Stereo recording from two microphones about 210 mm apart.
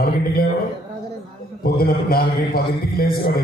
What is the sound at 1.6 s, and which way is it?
A man's voice, 45° left (ahead or behind).